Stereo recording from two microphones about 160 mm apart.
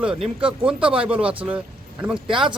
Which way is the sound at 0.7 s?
5° right (ahead or behind).